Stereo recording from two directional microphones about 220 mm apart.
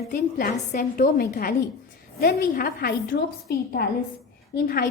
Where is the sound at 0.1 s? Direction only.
40° left (ahead or behind).